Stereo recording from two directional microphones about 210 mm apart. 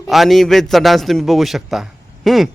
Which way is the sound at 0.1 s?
Centre (ahead or behind).